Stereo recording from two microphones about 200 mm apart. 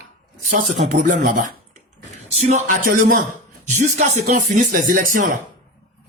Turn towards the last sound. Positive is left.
turn(degrees=-40)  # may be behind; listen again after turning